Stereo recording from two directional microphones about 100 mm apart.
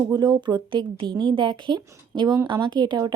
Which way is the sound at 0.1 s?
40° right (ahead or behind).